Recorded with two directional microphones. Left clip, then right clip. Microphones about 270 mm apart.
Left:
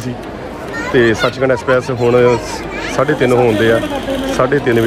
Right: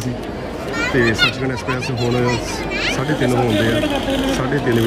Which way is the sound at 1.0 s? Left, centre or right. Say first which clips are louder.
Left 5 dB; centre.